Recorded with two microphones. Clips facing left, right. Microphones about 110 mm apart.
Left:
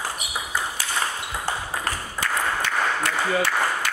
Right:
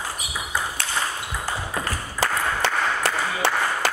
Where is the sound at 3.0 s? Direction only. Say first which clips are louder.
Left 1 dB; 30° right (ahead or behind).